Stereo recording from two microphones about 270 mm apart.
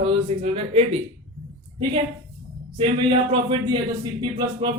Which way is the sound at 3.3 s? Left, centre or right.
Centre.